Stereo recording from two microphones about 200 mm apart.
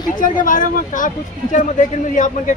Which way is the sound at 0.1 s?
40° left (ahead or behind).